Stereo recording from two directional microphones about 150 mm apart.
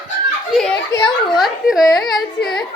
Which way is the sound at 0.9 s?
25° left (ahead or behind).